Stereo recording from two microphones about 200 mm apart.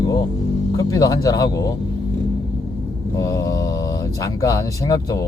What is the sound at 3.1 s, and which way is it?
Speech, 15° left (ahead or behind).